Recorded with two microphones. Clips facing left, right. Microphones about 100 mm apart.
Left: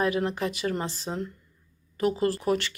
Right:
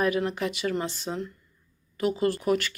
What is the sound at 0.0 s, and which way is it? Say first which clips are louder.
Speech: even; 30° left (ahead or behind).